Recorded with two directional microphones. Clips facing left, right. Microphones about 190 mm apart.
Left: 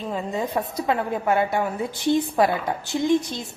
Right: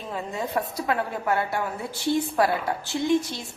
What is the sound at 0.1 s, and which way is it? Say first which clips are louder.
A woman's voice: left 2 dB; 20° left (ahead or behind).